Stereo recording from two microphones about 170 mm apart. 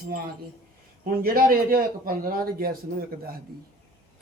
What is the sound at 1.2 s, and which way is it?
A man's voice, 55° right (ahead or behind).